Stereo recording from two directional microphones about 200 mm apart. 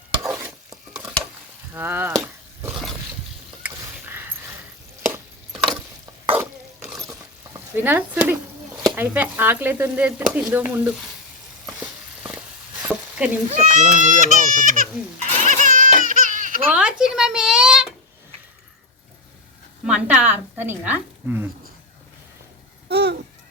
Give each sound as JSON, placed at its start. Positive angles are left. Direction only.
{"t": 0.2, "sound": "stir", "side_deg": -10}
{"t": 1.7, "sound": "speech", "side_deg": -10}
{"t": 2.2, "sound": "dog", "side_deg": -10}
{"t": 3.6, "sound": "a sound", "side_deg": -10}
{"t": 5.5, "sound": "a sound", "side_deg": 0}
{"t": 6.3, "sound": "stir", "side_deg": -10}
{"t": 7.8, "sound": "speech", "side_deg": -10}
{"t": 11.6, "sound": "a sound", "side_deg": -5}
{"t": 12.8, "sound": "stir", "side_deg": -5}
{"t": 13.5, "sound": "speech", "side_deg": -40}
{"t": 15.4, "sound": "a sound", "side_deg": -40}
{"t": 16.7, "sound": "a woman's voice", "side_deg": -5}
{"t": 19.8, "sound": "a woman's voice", "side_deg": -5}
{"t": 22.9, "sound": "babbling", "side_deg": -60}